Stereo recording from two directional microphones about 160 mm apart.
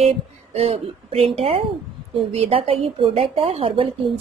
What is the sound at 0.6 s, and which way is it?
A woman's voice, 35° right (ahead or behind).